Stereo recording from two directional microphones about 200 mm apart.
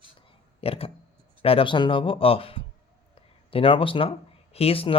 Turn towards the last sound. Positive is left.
turn(degrees=30)  # may be behind; listen again after turning